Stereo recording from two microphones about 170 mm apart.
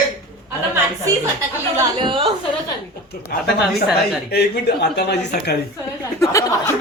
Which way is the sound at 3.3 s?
60° left (ahead or behind).